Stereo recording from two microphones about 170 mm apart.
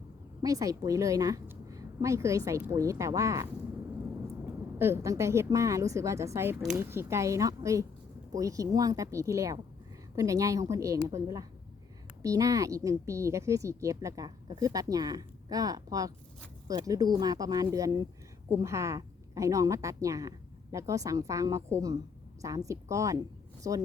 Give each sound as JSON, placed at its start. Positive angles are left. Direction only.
{"t": 0.4, "sound": "a woman's voice", "side_deg": -20}